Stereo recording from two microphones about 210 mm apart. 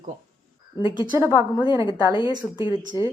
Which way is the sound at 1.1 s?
10° right (ahead or behind).